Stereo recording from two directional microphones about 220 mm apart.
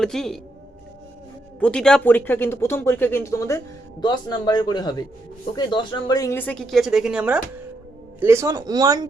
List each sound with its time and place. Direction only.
0.0 s speech: centre (ahead or behind)
1.5 s a man's voice: 5° left (ahead or behind); by 9.0 s 15° right (ahead or behind)